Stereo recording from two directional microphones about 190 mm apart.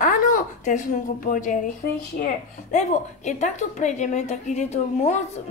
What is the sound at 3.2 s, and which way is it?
Speech, 40° left (ahead or behind).